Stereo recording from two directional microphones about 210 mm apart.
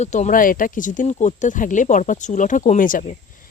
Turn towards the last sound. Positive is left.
turn(degrees=40)  # may be behind; listen again after turning